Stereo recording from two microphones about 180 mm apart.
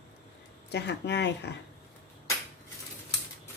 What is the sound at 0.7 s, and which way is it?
Speech, 70° left (ahead or behind).